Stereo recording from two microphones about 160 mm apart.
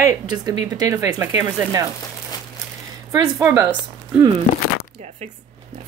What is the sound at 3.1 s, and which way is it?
Speech, 20° right (ahead or behind).